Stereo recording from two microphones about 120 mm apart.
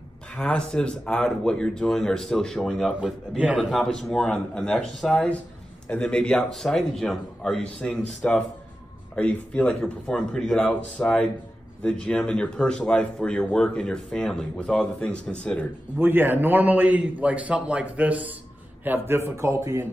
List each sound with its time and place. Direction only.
0.3 s a man's voice: 10° left (ahead or behind)
16.0 s a man's voice: 15° right (ahead or behind)